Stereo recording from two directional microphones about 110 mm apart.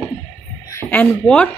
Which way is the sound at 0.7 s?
20° left (ahead or behind).